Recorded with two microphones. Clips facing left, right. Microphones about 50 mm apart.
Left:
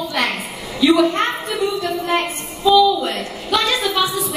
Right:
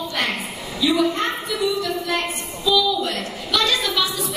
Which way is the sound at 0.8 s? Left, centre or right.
Left.